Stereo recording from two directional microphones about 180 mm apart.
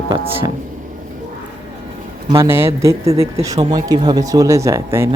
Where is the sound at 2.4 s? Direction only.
15° right (ahead or behind).